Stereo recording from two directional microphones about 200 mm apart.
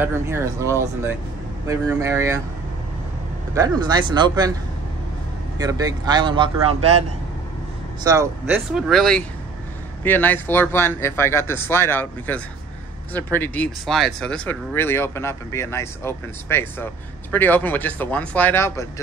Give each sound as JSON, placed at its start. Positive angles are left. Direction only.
{"t": 0.0, "sound": "speech", "side_deg": -10}
{"t": 1.7, "sound": "speech", "side_deg": -15}
{"t": 3.5, "sound": "speech", "side_deg": -20}
{"t": 5.6, "sound": "speech", "side_deg": -20}
{"t": 8.0, "sound": "speech", "side_deg": -15}
{"t": 8.5, "sound": "speech", "side_deg": -5}